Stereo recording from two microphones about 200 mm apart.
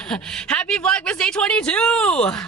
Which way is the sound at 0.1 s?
5° left (ahead or behind).